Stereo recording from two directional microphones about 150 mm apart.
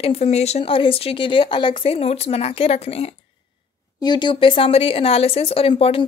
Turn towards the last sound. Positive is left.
turn(degrees=40)  # may be behind; listen again after turning